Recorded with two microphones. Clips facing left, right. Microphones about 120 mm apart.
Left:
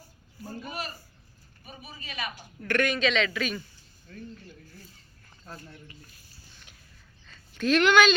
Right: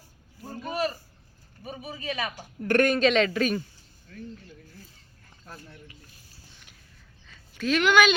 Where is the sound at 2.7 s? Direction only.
45° right (ahead or behind).